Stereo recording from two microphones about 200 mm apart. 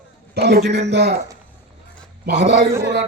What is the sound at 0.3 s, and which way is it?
Speech, 55° right (ahead or behind).